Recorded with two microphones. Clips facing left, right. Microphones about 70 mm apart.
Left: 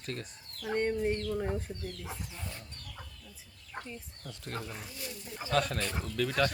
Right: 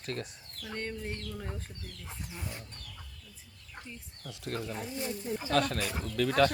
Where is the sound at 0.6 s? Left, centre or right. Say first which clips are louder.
Left 8 dB; left.